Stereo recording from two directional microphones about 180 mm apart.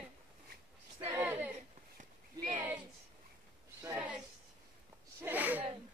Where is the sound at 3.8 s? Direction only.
10° right (ahead or behind).